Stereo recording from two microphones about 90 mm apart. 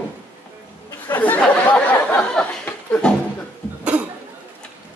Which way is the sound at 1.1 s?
20° left (ahead or behind).